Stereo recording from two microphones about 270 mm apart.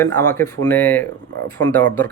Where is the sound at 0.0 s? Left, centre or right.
Centre.